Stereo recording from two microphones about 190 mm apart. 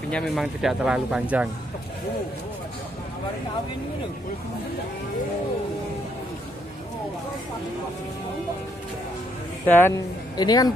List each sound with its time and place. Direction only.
0.1 s speech: centre (ahead or behind)
9.7 s speech: 10° left (ahead or behind)